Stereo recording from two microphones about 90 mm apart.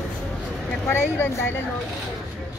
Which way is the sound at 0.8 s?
25° left (ahead or behind).